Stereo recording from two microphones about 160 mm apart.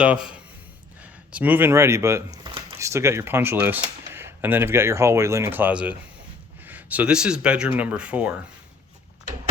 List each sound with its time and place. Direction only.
0.0 s speech: 5° right (ahead or behind)